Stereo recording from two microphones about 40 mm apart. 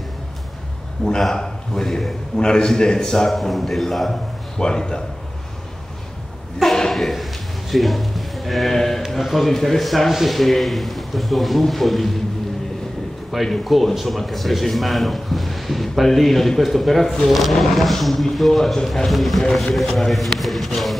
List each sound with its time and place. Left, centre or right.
1.0 s a man's voice: centre
3.3 s a man's voice: centre
4.6 s a man's voice: centre
6.9 s a sound: centre
8.7 s a man's voice: centre
13.3 s a man's voice: centre